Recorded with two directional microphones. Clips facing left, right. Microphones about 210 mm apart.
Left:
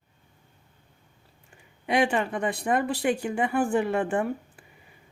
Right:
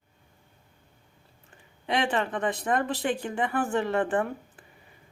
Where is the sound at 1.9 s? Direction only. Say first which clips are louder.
Left 3 dB; 10° left (ahead or behind).